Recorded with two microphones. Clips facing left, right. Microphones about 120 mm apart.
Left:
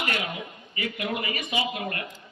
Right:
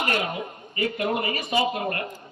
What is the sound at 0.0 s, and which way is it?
Music, 40° right (ahead or behind).